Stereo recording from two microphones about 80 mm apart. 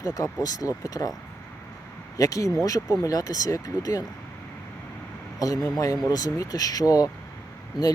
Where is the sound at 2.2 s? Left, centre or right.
Left.